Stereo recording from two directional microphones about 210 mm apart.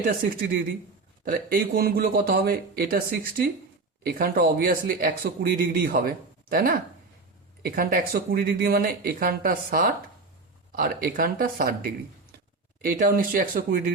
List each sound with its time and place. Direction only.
1.2 s speech: 40° right (ahead or behind)